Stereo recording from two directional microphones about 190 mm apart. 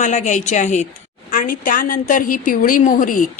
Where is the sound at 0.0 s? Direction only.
40° left (ahead or behind).